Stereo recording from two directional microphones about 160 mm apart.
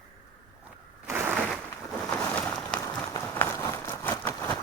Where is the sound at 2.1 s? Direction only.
5° left (ahead or behind).